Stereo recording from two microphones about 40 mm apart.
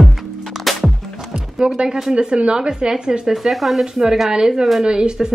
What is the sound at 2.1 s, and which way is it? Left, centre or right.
Speech, right.